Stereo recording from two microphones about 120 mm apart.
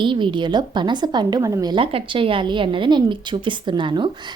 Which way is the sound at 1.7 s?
45° right (ahead or behind).